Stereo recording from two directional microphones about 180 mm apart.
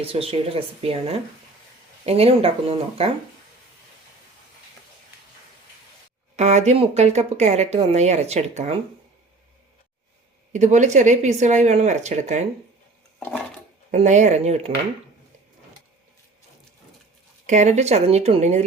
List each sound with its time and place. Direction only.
0.0 s a woman's voice: 30° right (ahead or behind)
6.3 s a woman's voice: 40° right (ahead or behind)
10.5 s a woman's voice: 40° right (ahead or behind)
13.9 s a woman's voice: 40° right (ahead or behind)
17.4 s a woman's voice: 40° right (ahead or behind)